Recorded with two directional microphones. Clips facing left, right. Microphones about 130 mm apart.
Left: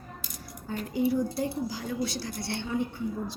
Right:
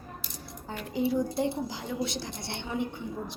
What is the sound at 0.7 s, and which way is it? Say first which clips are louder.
A woman's voice: left 2 dB; 20° right (ahead or behind).